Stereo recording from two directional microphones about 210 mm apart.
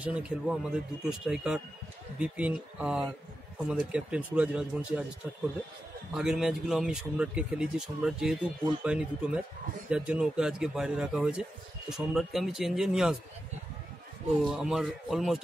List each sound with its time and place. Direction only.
0.0 s a man's voice: 5° right (ahead or behind)
14.4 s speech: centre (ahead or behind)